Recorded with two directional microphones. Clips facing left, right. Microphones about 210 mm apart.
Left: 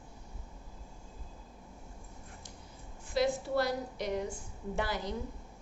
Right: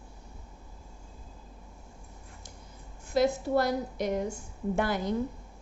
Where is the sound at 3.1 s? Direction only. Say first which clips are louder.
Right 5 dB; 45° right (ahead or behind).